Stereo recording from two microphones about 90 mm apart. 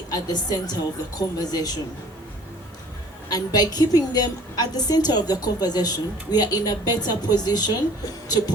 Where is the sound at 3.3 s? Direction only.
50° left (ahead or behind).